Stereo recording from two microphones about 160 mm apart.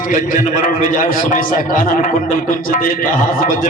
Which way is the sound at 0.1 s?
55° left (ahead or behind).